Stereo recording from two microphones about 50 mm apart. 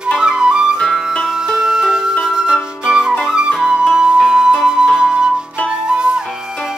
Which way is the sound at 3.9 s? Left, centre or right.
Centre.